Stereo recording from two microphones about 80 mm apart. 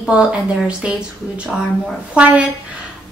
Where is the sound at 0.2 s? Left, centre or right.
Centre.